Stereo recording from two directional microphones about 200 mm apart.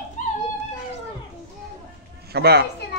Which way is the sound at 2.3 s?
55° right (ahead or behind).